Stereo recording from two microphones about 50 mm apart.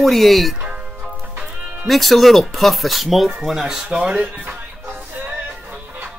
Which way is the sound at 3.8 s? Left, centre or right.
Right.